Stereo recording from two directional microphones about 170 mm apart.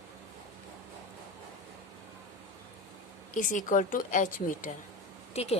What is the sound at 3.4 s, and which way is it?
A woman's voice, 50° left (ahead or behind).